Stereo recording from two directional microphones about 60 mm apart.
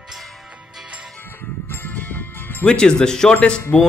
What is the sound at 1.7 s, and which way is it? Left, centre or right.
Music, left.